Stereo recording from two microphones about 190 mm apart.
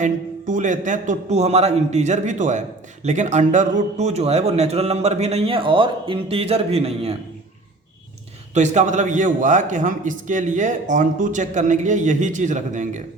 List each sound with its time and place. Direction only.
0.0 s a man's voice: 40° right (ahead or behind)
8.5 s a man's voice: 40° right (ahead or behind)